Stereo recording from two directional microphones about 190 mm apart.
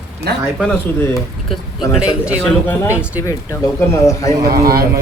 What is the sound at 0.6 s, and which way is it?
Speech, 5° left (ahead or behind).